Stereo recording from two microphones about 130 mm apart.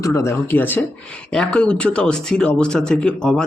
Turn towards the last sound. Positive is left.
turn(degrees=5)  # may be behind; listen again after turning